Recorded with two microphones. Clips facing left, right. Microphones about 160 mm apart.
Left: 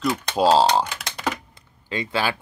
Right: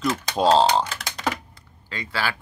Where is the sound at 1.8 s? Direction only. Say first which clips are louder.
Left 4 dB; 20° left (ahead or behind).